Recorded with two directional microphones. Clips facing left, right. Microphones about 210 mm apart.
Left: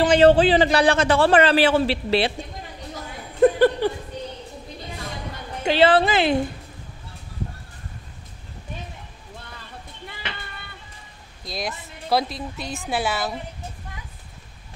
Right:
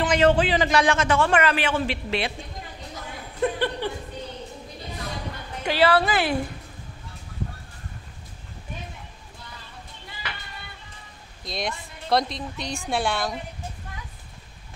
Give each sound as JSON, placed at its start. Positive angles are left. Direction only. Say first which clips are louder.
{"t": 0.0, "sound": "a man's voice", "louder": "left 5 dB", "side_deg": 30}
{"t": 3.3, "sound": "chuckle", "louder": "left 9 dB", "side_deg": 45}
{"t": 5.6, "sound": "a woman's voice", "louder": "left 4 dB", "side_deg": 25}
{"t": 11.4, "sound": "a woman's voice", "louder": "even", "side_deg": 0}